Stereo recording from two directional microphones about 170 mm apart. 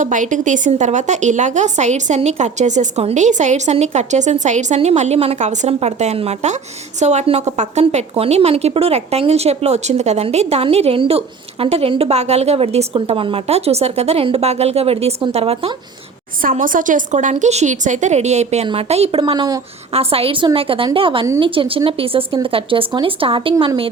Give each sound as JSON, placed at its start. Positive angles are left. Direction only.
{"t": 0.0, "sound": "a woman's voice", "side_deg": -50}
{"t": 16.4, "sound": "a woman's voice", "side_deg": -55}
{"t": 19.9, "sound": "a woman's voice", "side_deg": -35}